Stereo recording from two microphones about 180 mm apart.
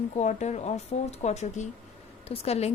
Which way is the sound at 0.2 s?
40° left (ahead or behind).